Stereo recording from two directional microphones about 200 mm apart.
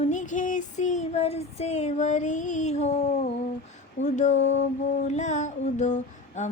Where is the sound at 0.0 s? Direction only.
40° left (ahead or behind).